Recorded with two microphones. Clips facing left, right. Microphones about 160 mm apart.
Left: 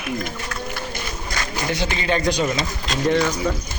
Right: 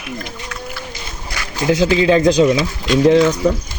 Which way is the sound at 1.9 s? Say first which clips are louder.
Right 10 dB; 90° right.